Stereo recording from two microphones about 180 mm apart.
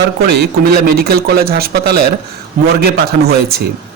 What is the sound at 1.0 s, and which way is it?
Speech, 60° right (ahead or behind).